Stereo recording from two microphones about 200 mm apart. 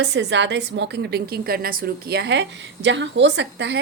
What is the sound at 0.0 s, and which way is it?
A woman's voice, 60° right (ahead or behind).